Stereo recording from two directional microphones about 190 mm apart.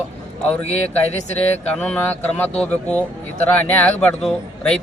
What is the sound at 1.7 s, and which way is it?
A man's voice, 5° left (ahead or behind).